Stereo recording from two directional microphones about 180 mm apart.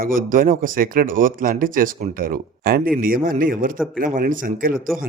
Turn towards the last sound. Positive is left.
turn(degrees=-50)  # may be behind; listen again after turning